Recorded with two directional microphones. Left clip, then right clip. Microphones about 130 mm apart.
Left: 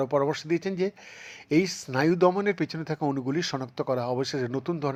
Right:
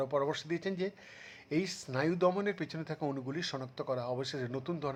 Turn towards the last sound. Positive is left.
turn(degrees=35)  # may be behind; listen again after turning